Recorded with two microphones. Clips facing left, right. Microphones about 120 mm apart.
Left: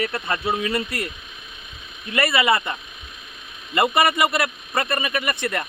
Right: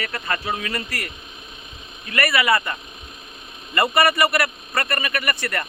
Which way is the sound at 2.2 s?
25° left (ahead or behind).